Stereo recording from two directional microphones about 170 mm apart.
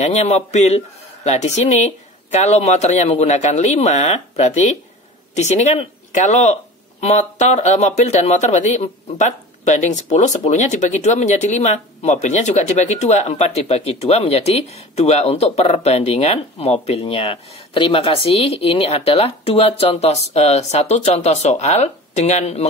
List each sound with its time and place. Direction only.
0.0 s speech: 40° left (ahead or behind)